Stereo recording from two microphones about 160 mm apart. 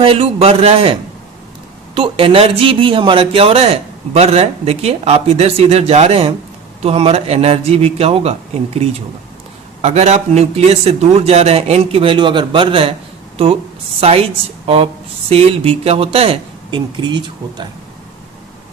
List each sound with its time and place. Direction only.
0.0 s a man's voice: 35° right (ahead or behind)
2.0 s a man's voice: 35° right (ahead or behind)
15.3 s a man's voice: 35° right (ahead or behind)